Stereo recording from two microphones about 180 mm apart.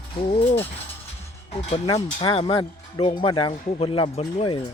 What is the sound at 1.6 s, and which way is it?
Speech, 35° left (ahead or behind).